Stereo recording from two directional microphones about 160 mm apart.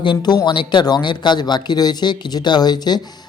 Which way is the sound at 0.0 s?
30° left (ahead or behind).